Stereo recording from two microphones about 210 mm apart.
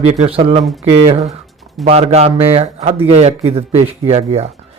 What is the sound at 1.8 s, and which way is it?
Speech, 30° right (ahead or behind).